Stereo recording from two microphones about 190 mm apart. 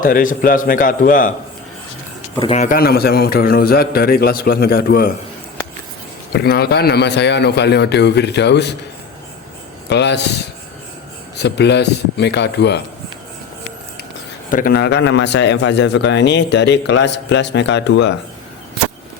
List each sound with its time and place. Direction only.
0.0 s a man's voice: 45° left (ahead or behind)
2.4 s a man's voice: 35° left (ahead or behind)
2.7 s a man's voice: 55° left (ahead or behind)
6.3 s a man's voice: 55° left (ahead or behind)
9.9 s a man's voice: 65° left (ahead or behind)
11.4 s a man's voice: 65° left (ahead or behind)
14.5 s a man's voice: 50° left (ahead or behind)